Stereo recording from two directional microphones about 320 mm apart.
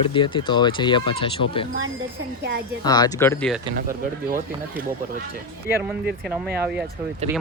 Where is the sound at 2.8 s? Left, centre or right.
Centre.